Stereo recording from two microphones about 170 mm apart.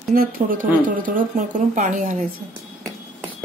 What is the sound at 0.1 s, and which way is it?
Speech, 55° right (ahead or behind).